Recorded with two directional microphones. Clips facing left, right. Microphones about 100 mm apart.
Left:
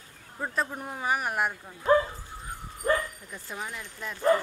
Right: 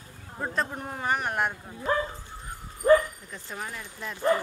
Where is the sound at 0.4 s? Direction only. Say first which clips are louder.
Right 1 dB; centre (ahead or behind).